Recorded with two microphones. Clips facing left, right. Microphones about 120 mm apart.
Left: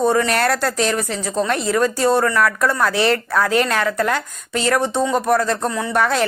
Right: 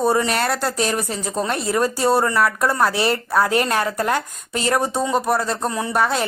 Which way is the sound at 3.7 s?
30° right (ahead or behind).